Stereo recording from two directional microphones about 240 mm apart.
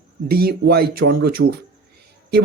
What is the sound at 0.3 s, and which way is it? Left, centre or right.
Speech, right.